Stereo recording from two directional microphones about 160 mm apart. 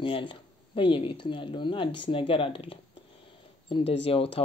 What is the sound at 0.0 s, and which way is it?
Speech, 30° left (ahead or behind).